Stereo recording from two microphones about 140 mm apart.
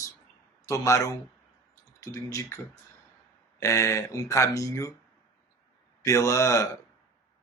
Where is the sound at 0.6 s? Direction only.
20° left (ahead or behind).